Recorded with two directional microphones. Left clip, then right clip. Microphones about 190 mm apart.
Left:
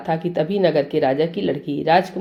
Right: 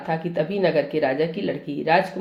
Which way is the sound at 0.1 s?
50° left (ahead or behind).